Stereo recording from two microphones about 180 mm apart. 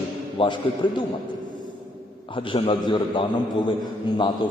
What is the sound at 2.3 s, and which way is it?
A man's voice, 30° left (ahead or behind).